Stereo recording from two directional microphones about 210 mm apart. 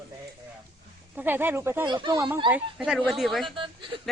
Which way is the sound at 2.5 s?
5° right (ahead or behind).